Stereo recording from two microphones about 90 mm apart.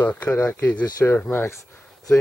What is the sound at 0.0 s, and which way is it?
Speech, 20° left (ahead or behind).